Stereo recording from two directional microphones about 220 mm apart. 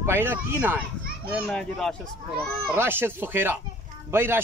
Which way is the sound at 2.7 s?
10° right (ahead or behind).